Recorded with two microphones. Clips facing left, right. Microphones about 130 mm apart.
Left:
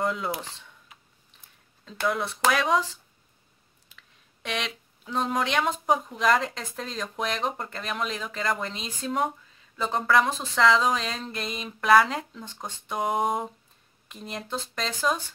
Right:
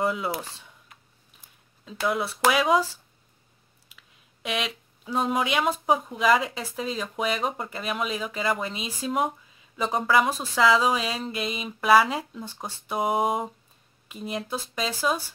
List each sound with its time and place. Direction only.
0.0 s speech: 5° right (ahead or behind)
1.9 s speech: 5° right (ahead or behind)
3.9 s speech: 5° right (ahead or behind)